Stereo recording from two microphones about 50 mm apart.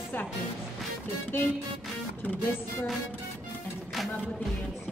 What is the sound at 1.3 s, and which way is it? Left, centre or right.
Music, left.